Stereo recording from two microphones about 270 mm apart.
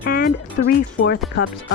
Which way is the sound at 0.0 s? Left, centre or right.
Left.